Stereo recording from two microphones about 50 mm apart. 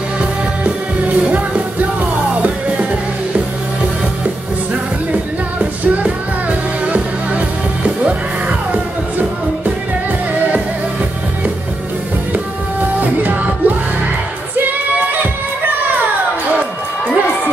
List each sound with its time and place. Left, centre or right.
0.7 s music: right
5.6 s music: right
13.0 s music: right